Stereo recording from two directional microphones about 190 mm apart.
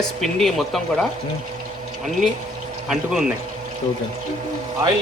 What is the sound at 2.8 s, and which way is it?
Speech, 5° right (ahead or behind).